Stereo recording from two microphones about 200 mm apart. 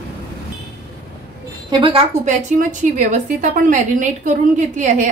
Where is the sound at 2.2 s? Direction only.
40° right (ahead or behind).